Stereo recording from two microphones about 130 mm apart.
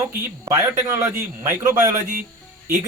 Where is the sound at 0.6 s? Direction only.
20° right (ahead or behind).